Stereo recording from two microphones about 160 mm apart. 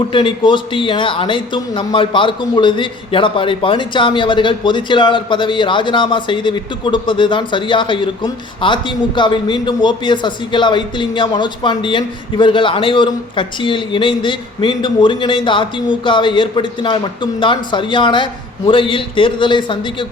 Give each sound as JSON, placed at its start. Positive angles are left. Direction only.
{"t": 0.1, "sound": "speech", "side_deg": 30}